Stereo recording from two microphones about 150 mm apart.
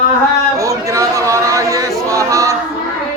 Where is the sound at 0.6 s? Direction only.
20° right (ahead or behind).